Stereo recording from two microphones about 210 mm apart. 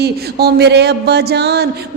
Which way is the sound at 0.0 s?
50° right (ahead or behind).